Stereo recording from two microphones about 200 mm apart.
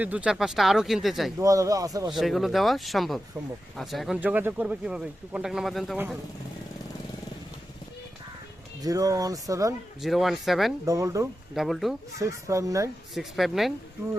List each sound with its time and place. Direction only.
0.0 s speech: 5° right (ahead or behind)
1.4 s speech: 15° right (ahead or behind)
2.1 s speech: centre (ahead or behind)
8.8 s speech: 15° right (ahead or behind)
10.0 s speech: centre (ahead or behind)
10.8 s speech: 15° right (ahead or behind)
11.5 s speech: centre (ahead or behind)
12.2 s speech: 15° right (ahead or behind)
13.1 s speech: centre (ahead or behind)